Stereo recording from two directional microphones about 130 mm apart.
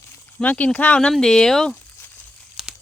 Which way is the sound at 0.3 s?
10° left (ahead or behind).